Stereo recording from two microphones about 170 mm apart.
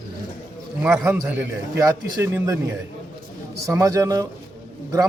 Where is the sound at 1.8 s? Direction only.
15° right (ahead or behind).